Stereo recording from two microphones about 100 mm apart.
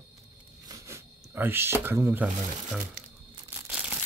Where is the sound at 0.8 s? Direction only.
25° right (ahead or behind).